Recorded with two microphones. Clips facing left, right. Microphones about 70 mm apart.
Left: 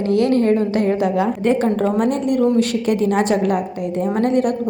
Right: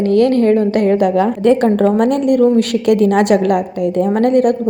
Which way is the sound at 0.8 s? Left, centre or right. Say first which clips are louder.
Right 5 dB; right.